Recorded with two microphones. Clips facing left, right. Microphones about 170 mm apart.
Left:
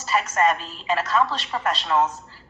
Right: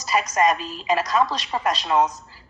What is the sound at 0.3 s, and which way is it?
A woman's voice, 15° right (ahead or behind).